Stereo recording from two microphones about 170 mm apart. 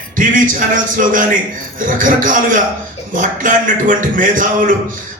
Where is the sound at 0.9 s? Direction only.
50° right (ahead or behind).